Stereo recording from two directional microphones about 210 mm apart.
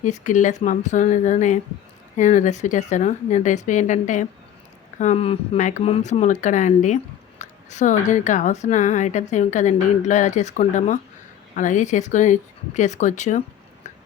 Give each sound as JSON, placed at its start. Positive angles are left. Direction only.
{"t": 0.0, "sound": "speech", "side_deg": 35}